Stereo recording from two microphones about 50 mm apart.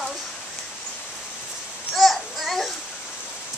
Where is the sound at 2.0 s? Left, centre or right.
Centre.